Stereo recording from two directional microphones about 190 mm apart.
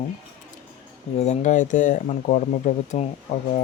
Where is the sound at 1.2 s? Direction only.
40° left (ahead or behind).